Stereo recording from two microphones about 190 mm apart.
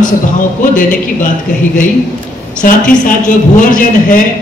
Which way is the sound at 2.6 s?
45° left (ahead or behind).